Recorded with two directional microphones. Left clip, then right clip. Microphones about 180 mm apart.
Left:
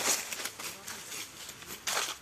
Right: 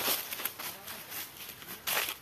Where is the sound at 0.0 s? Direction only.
25° left (ahead or behind).